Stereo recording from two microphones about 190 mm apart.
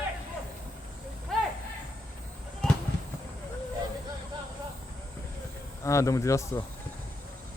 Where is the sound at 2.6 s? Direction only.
5° left (ahead or behind).